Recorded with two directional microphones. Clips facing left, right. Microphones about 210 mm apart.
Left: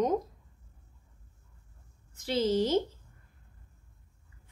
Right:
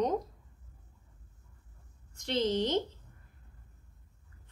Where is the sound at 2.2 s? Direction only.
5° left (ahead or behind).